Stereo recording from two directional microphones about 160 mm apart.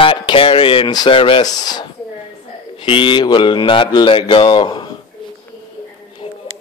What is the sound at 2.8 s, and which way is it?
Mantra, 35° left (ahead or behind).